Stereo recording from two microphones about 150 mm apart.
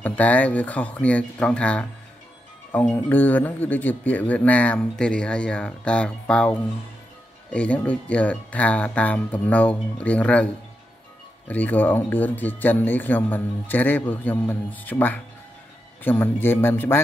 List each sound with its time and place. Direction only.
0.0 s speech: 10° left (ahead or behind)
7.5 s speech: 10° left (ahead or behind)